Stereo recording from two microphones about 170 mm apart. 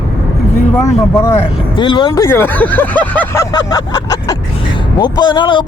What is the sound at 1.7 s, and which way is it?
Speech, 30° left (ahead or behind).